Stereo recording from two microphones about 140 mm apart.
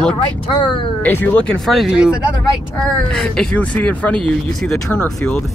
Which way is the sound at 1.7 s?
5° right (ahead or behind).